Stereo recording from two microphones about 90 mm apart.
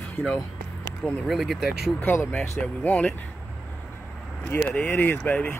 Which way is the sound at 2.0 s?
20° left (ahead or behind).